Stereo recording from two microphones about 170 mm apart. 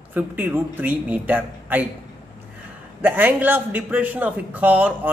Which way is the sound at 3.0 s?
10° right (ahead or behind).